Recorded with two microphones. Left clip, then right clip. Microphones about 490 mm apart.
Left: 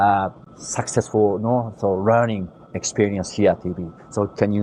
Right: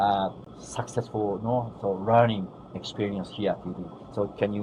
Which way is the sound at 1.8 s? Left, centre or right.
Left.